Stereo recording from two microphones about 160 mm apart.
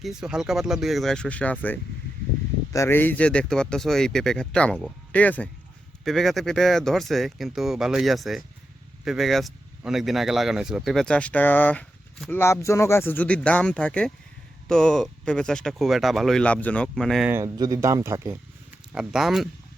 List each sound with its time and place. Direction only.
0.0 s speech: 5° right (ahead or behind)
17.2 s speech: 15° right (ahead or behind)
18.9 s speech: 5° right (ahead or behind)